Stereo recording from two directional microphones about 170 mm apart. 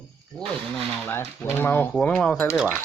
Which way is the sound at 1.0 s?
10° left (ahead or behind).